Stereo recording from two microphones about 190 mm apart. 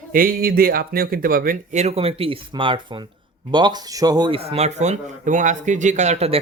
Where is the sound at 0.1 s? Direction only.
50° right (ahead or behind).